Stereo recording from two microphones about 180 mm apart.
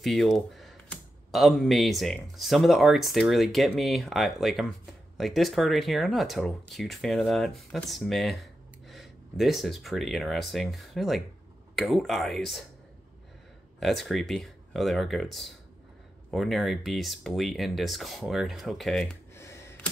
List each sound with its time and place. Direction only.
0.0 s speech: centre (ahead or behind)
13.7 s speech: centre (ahead or behind)
19.3 s a sound: 15° left (ahead or behind)